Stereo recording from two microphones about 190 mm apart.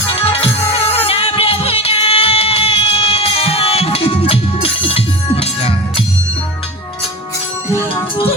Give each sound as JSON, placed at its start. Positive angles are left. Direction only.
{"t": 0.2, "sound": "music", "side_deg": 30}